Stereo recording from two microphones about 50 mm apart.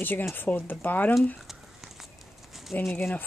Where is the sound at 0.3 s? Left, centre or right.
Left.